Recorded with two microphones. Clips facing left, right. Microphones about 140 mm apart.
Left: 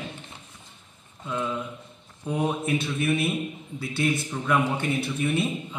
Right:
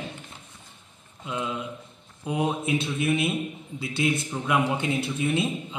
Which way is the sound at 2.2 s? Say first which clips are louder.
Even; 15° right (ahead or behind).